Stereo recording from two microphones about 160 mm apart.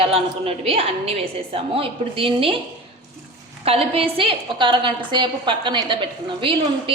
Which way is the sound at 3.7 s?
35° right (ahead or behind).